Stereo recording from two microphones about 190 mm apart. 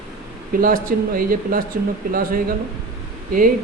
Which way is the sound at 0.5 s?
50° right (ahead or behind).